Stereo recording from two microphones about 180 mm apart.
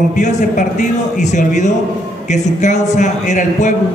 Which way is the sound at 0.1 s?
40° left (ahead or behind).